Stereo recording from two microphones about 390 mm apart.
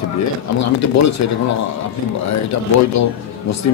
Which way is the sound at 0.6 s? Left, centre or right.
Left.